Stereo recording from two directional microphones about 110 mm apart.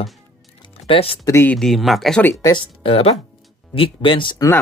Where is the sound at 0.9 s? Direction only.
60° left (ahead or behind).